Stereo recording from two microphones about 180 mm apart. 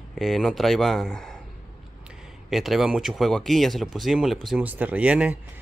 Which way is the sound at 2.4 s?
Centre (ahead or behind).